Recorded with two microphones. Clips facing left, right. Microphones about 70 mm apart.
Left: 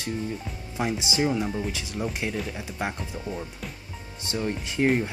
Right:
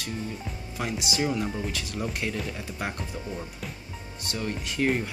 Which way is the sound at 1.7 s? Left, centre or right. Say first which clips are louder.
Left 1 dB; centre.